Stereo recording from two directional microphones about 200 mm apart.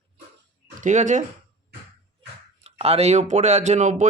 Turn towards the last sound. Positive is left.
turn(degrees=-35)  # may be behind; listen again after turning